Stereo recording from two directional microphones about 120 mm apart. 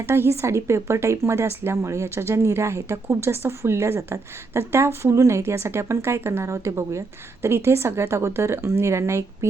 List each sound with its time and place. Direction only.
0.0 s speech: 20° right (ahead or behind)